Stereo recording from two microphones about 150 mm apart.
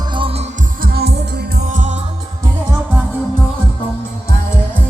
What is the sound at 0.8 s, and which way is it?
Music, 90° right.